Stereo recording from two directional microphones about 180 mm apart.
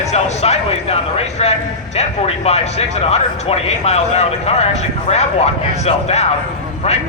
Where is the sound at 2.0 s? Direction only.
35° left (ahead or behind).